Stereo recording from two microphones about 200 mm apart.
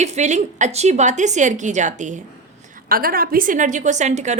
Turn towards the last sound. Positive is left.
turn(degrees=-35)  # may be behind; listen again after turning